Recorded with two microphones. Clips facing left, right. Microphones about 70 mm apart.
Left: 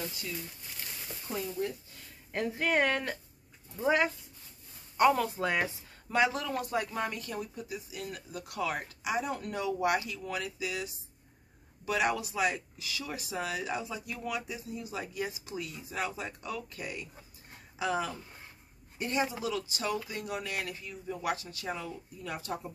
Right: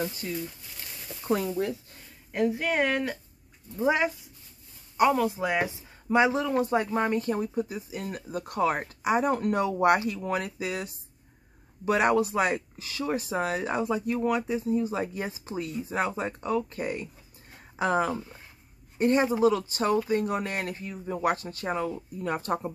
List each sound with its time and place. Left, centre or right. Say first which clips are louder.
0.2 s speech: right 6 dB; right
2.3 s speech: right 4 dB; centre
3.8 s speech: right 3 dB; centre; by 22.7 s right